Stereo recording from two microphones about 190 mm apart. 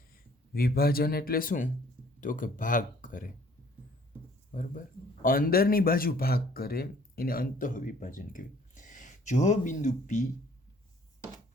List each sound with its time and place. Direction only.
0.5 s speech: 55° left (ahead or behind)
5.2 s speech: 50° left (ahead or behind)